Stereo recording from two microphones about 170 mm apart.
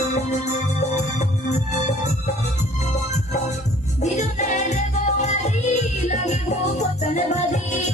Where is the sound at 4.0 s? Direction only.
45° left (ahead or behind).